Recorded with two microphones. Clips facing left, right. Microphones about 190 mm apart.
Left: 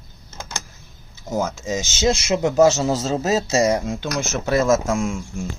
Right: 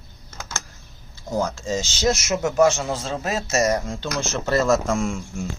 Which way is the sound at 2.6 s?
40° left (ahead or behind).